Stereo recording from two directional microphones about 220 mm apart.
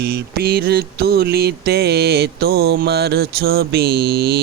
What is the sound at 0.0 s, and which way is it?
Mantra, 45° right (ahead or behind).